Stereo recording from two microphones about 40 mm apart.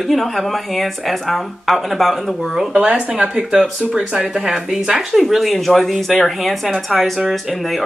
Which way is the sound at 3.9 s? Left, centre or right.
Centre.